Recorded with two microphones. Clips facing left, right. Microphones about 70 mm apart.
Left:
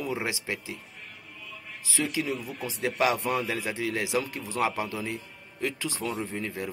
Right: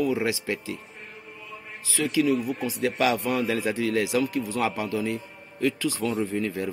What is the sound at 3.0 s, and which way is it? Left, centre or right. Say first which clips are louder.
Speech: right 1 dB; left.